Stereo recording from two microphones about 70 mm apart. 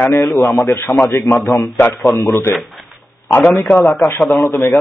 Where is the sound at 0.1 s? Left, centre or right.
Left.